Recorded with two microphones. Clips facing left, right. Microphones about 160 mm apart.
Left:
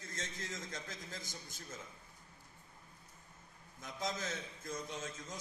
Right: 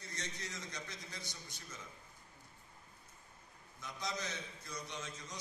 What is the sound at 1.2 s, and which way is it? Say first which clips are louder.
Speech: left 1 dB; 75° right (ahead or behind).